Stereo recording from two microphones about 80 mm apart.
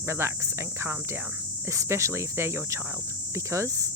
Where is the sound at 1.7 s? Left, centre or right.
Right.